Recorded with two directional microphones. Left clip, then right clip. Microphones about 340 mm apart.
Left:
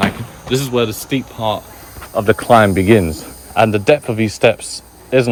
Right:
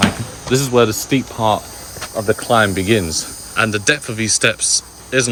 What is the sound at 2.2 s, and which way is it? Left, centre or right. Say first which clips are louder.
Speech: left 4 dB; left.